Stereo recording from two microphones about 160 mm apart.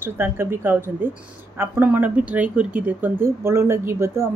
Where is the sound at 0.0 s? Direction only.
15° right (ahead or behind).